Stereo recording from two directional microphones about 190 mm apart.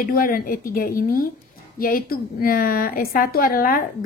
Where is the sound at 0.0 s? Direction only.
50° left (ahead or behind).